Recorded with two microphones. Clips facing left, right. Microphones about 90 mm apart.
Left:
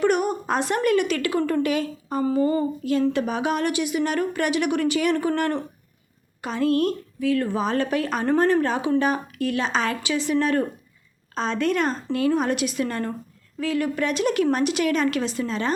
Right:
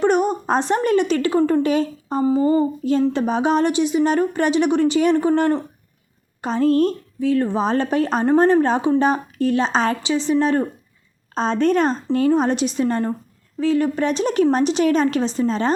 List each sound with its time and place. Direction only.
0.0 s a woman's voice: 30° right (ahead or behind)
6.4 s a woman's voice: 35° right (ahead or behind)